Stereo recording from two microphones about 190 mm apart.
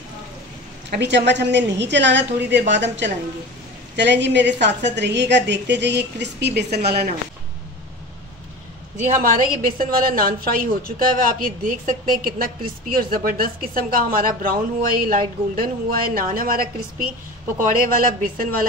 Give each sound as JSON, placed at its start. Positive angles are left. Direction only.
{"t": 0.8, "sound": "a woman's voice", "side_deg": -65}
{"t": 9.1, "sound": "speech", "side_deg": -45}